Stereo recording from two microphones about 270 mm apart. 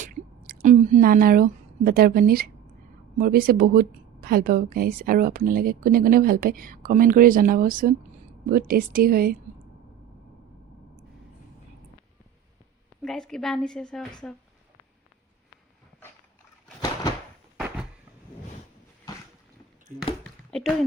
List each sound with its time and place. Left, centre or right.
0.0 s a woman's voice: right
13.0 s a woman's voice: centre
19.9 s speech: right
20.5 s a woman's voice: centre